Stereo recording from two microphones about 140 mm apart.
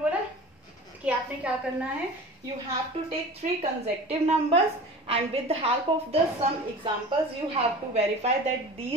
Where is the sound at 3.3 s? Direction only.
50° right (ahead or behind).